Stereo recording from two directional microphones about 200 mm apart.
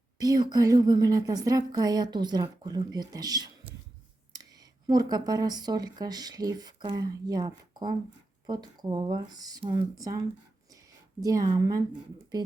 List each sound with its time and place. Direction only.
0.2 s a woman's voice: 20° right (ahead or behind)
4.9 s a woman's voice: 20° right (ahead or behind)